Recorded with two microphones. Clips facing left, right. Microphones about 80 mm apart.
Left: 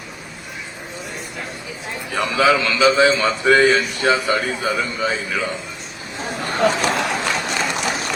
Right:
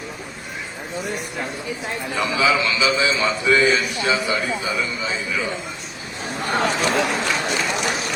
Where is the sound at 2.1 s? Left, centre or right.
Left.